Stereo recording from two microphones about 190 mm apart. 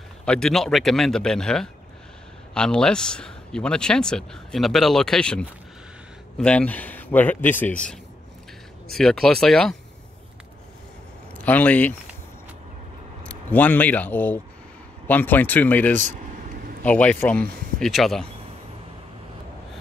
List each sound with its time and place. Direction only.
0.2 s a man's voice: 5° left (ahead or behind)
11.3 s speech: 10° left (ahead or behind)
13.3 s a man's voice: 10° left (ahead or behind)